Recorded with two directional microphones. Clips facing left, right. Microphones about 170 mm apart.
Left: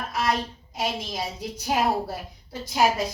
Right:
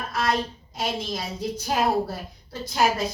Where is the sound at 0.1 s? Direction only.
10° left (ahead or behind).